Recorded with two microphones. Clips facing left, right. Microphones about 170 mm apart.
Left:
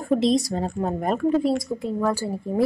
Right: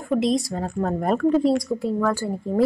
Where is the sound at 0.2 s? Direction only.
30° left (ahead or behind).